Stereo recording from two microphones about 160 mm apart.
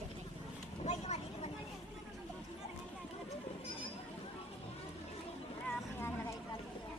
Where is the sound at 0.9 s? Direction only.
45° left (ahead or behind).